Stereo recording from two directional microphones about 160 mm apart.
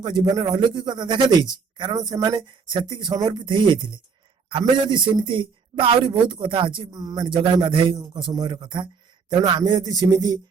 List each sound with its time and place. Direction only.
0.0 s speech: 25° right (ahead or behind)